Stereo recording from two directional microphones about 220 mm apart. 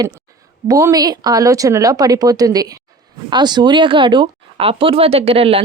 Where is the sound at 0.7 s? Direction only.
15° right (ahead or behind).